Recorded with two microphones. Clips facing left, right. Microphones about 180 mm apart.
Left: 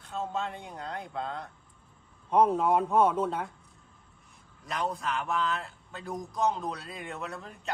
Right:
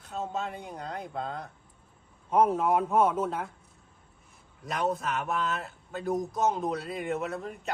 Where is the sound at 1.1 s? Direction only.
45° right (ahead or behind).